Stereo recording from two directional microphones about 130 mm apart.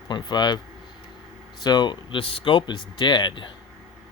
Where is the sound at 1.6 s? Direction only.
35° left (ahead or behind).